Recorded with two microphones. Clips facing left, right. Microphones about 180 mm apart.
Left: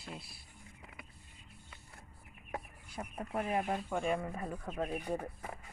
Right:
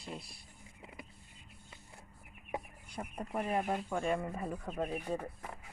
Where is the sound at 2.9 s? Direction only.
5° left (ahead or behind).